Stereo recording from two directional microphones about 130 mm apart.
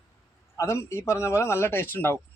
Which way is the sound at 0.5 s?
25° left (ahead or behind).